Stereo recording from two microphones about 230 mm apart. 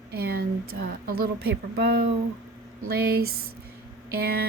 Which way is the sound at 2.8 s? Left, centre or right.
Right.